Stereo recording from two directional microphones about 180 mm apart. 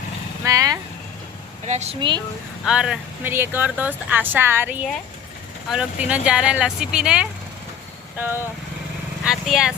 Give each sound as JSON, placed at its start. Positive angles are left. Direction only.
{"t": 0.4, "sound": "vehicle", "side_deg": -20}
{"t": 1.6, "sound": "speech", "side_deg": -40}
{"t": 2.6, "sound": "speech", "side_deg": -5}